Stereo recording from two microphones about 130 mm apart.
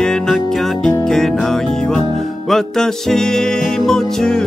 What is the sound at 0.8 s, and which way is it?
Music, 5° left (ahead or behind).